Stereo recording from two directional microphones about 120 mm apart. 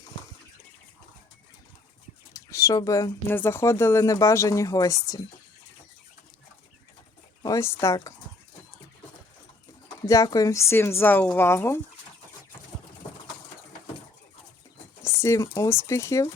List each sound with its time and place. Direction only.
2.3 s speech: 25° left (ahead or behind)
7.4 s speech: 25° left (ahead or behind)
10.1 s speech: 30° left (ahead or behind)
15.0 s speech: 20° left (ahead or behind)